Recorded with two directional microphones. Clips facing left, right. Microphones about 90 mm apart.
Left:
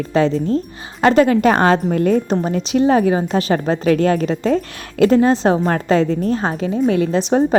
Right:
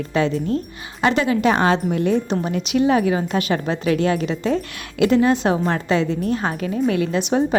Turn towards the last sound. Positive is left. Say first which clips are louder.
# left 4 dB
turn(degrees=35)  # may be behind; listen again after turning